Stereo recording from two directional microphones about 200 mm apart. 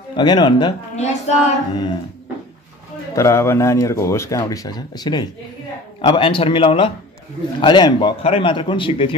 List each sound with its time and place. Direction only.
0.1 s speech: 20° left (ahead or behind)
0.9 s speech: 35° left (ahead or behind)
3.2 s speech: 15° left (ahead or behind)